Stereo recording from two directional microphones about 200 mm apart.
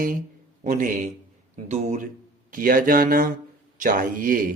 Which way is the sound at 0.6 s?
40° right (ahead or behind).